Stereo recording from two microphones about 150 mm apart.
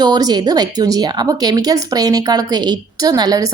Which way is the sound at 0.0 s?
25° right (ahead or behind).